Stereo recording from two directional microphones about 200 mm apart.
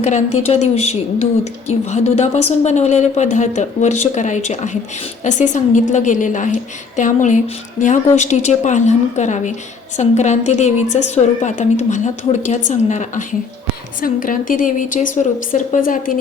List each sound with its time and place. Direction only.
0.0 s a woman's voice: 35° left (ahead or behind)